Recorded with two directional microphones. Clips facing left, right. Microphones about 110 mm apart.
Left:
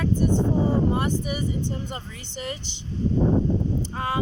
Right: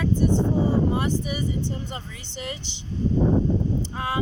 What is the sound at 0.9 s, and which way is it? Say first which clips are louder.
Speech: even; 50° left (ahead or behind).